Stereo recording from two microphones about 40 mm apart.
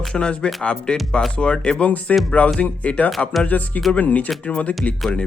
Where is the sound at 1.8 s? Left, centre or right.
Left.